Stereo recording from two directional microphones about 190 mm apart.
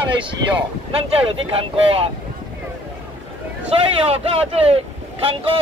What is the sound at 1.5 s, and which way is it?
Speech, 30° right (ahead or behind).